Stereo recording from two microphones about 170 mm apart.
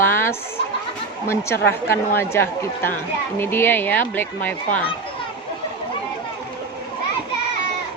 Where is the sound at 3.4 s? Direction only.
15° left (ahead or behind).